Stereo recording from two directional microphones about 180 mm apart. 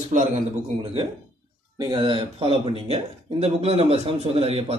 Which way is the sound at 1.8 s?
25° right (ahead or behind).